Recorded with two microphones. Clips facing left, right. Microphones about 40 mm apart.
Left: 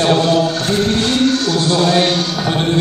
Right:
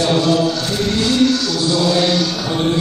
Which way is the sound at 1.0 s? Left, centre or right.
Left.